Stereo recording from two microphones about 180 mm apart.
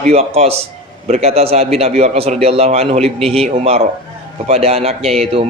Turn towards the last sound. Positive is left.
turn(degrees=-35)  # may be behind; listen again after turning